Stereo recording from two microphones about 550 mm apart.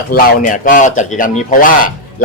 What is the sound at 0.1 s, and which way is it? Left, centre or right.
Speech, centre.